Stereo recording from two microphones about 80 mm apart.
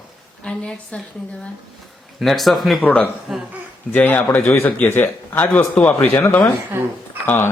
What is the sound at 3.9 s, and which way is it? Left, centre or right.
Speech, left.